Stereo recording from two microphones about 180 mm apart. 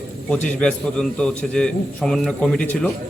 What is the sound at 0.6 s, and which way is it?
A man's voice, 5° left (ahead or behind).